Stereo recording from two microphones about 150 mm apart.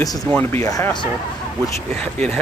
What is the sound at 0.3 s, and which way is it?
Speech, 15° left (ahead or behind).